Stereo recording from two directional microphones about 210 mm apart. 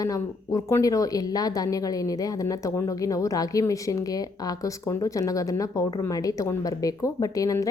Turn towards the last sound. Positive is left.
turn(degrees=15)  # may be behind; listen again after turning